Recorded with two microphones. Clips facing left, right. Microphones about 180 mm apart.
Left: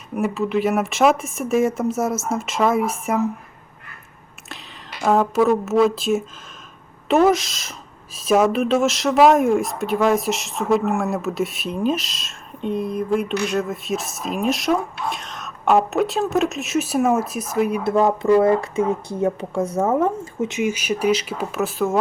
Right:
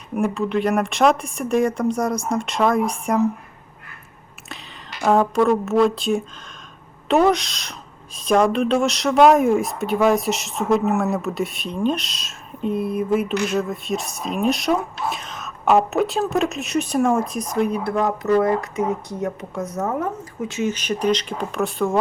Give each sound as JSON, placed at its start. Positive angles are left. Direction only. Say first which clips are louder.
{"t": 0.2, "sound": "speech", "louder": "even", "side_deg": 5}
{"t": 4.4, "sound": "a woman's voice", "louder": "even", "side_deg": 0}
{"t": 17.8, "sound": "speech", "louder": "left 4 dB", "side_deg": 25}